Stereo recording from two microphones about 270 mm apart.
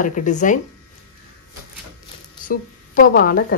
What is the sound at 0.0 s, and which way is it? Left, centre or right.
Speech, left.